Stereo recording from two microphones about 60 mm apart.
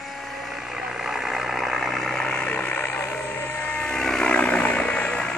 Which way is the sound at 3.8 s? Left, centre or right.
Centre.